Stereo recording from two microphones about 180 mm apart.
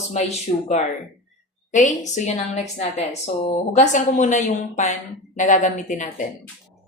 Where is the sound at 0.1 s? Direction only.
40° left (ahead or behind).